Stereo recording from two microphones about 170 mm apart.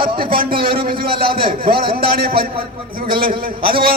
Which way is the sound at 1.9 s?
60° right (ahead or behind).